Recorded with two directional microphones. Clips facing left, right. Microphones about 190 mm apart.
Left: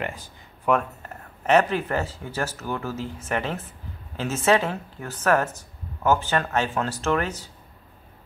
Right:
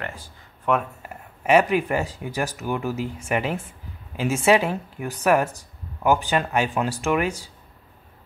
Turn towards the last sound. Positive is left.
turn(degrees=-10)  # may be behind; listen again after turning